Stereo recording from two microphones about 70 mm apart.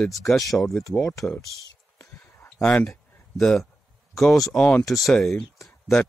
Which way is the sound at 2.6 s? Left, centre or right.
Centre.